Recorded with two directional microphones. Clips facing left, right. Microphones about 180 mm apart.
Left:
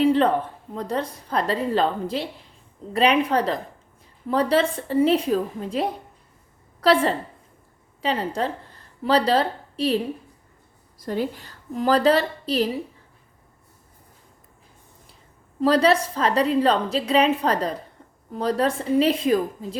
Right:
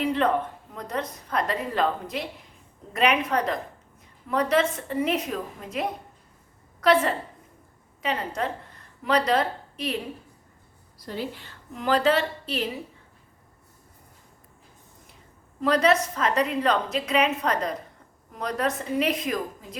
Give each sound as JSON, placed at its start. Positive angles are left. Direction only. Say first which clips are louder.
{"t": 0.0, "sound": "a sound", "louder": "left 6 dB", "side_deg": 30}
{"t": 0.7, "sound": "a woman's voice", "louder": "left 6 dB", "side_deg": 30}
{"t": 11.0, "sound": "a woman's voice", "louder": "left 6 dB", "side_deg": 45}
{"t": 15.6, "sound": "a woman's voice", "louder": "left 3 dB", "side_deg": 30}